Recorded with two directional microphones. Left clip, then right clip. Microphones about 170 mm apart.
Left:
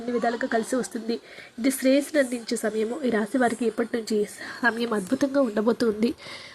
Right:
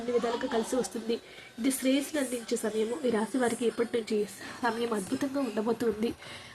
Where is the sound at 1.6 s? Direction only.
30° left (ahead or behind).